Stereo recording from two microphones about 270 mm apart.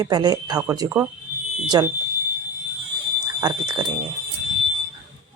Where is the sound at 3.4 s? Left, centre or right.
Centre.